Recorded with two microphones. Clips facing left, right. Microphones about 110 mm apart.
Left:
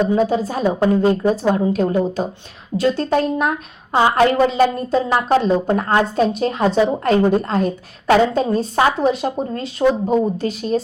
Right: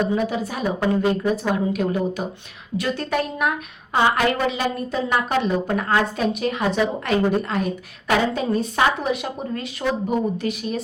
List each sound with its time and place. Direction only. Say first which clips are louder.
0.0 s a woman's voice: left 5 dB; 30° left (ahead or behind)